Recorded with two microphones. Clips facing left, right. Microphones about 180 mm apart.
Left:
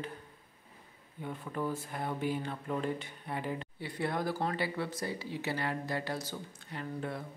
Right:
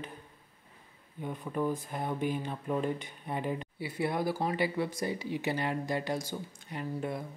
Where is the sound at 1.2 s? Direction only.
15° right (ahead or behind).